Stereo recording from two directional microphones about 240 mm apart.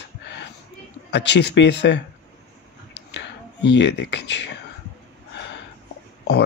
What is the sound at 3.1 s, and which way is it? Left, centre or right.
Speech, left.